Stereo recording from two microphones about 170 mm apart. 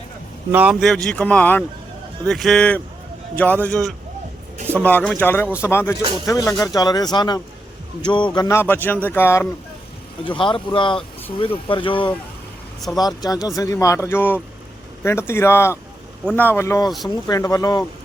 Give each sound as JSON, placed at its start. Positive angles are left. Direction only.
{"t": 0.5, "sound": "speech", "side_deg": -5}
{"t": 8.5, "sound": "speech", "side_deg": 10}
{"t": 10.2, "sound": "speech", "side_deg": 30}